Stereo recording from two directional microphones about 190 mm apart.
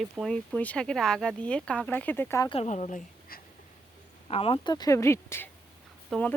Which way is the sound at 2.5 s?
35° left (ahead or behind).